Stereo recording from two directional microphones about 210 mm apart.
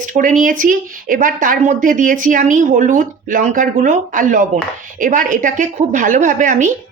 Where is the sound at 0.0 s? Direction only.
35° right (ahead or behind).